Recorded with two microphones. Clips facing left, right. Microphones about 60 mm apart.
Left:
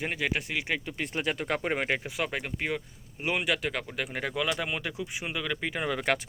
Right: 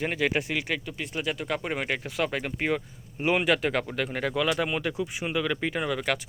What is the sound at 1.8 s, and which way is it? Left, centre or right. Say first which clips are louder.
Speech: right 2 dB; centre.